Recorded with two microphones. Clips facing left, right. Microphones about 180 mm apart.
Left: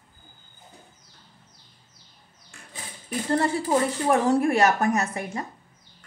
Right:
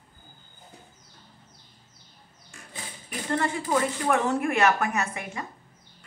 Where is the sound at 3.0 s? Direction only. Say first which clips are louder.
Left 4 dB; 35° left (ahead or behind).